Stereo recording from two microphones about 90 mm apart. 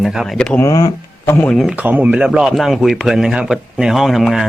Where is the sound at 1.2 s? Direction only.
25° left (ahead or behind).